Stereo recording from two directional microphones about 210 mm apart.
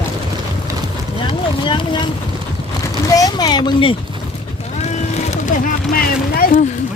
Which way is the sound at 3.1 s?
20° left (ahead or behind).